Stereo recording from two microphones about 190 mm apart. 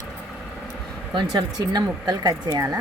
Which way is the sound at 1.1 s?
20° right (ahead or behind).